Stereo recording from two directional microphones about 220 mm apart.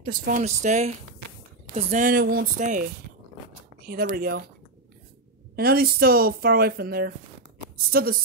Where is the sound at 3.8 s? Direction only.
45° right (ahead or behind).